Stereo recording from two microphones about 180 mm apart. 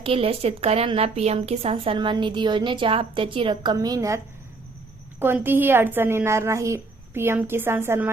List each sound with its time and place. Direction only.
0.0 s a woman's voice: 30° right (ahead or behind)
5.2 s a woman's voice: 10° right (ahead or behind)